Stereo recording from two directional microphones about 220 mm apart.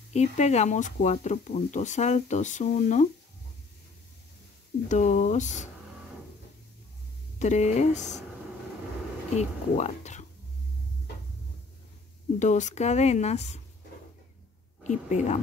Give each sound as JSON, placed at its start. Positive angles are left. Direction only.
{"t": 0.1, "sound": "speech", "side_deg": 30}
{"t": 4.8, "sound": "speech", "side_deg": 35}
{"t": 7.3, "sound": "speech", "side_deg": 30}
{"t": 9.3, "sound": "speech", "side_deg": 30}
{"t": 12.4, "sound": "speech", "side_deg": 35}
{"t": 14.8, "sound": "a woman's voice", "side_deg": 35}